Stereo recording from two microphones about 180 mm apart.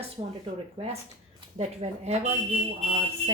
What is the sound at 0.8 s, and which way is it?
Speech, 30° right (ahead or behind).